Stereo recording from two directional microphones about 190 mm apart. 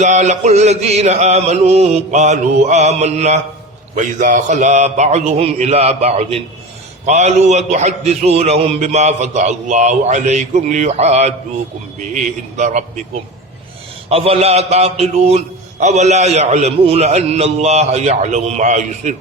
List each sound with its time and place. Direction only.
0.0 s a man's voice: 40° right (ahead or behind)
14.1 s a man's voice: 30° right (ahead or behind)